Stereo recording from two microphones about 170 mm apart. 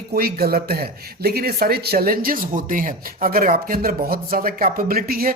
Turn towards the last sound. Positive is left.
turn(degrees=-60)  # may be behind; listen again after turning